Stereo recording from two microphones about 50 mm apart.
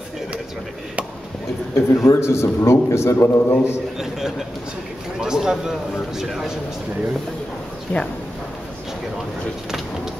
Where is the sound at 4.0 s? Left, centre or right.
Centre.